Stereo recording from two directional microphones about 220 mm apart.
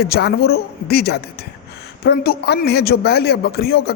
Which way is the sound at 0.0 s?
45° left (ahead or behind).